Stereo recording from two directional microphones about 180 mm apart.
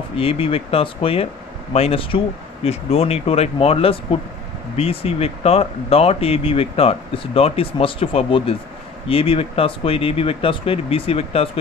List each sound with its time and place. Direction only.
0.1 s speech: 30° left (ahead or behind)